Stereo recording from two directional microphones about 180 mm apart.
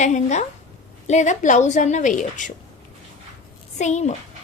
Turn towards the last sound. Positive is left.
turn(degrees=40)  # may be behind; listen again after turning